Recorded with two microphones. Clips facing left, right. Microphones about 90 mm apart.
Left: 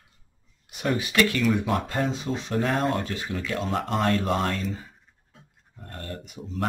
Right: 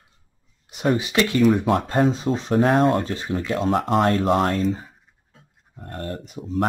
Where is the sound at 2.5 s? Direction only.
50° right (ahead or behind).